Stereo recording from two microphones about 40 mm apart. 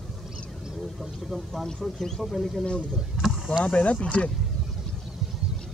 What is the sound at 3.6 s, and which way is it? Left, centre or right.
Speech, left.